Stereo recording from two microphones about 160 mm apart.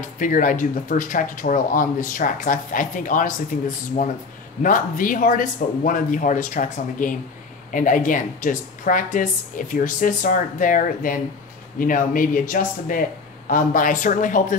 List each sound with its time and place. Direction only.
0.2 s speech: 55° left (ahead or behind)